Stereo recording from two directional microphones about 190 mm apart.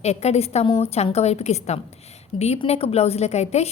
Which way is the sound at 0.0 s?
35° left (ahead or behind).